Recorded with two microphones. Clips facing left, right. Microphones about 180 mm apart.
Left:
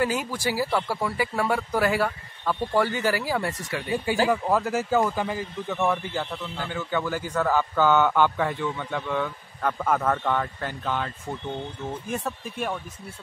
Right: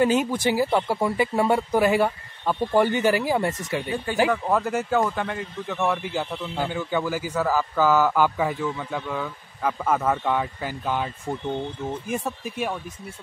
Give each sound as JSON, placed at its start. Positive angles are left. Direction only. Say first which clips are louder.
{"t": 0.0, "sound": "speech", "louder": "right 5 dB", "side_deg": -20}
{"t": 3.9, "sound": "speech", "louder": "left 1 dB", "side_deg": 10}
{"t": 12.1, "sound": "speech", "louder": "right 2 dB", "side_deg": -10}